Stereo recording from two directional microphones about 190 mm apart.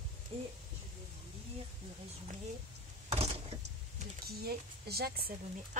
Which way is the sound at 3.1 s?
30° right (ahead or behind).